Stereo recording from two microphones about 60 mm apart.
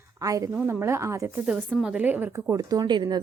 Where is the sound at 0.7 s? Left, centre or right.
Right.